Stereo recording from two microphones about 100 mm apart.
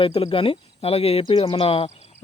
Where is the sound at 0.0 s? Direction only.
70° left (ahead or behind).